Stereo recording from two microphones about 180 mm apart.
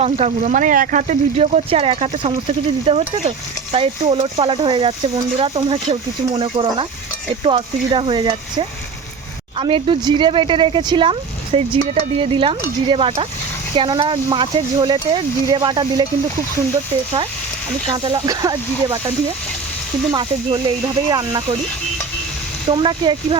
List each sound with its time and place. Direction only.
0.0 s speech: 35° right (ahead or behind)
17.8 s speech: 25° right (ahead or behind)
22.7 s speech: 25° right (ahead or behind)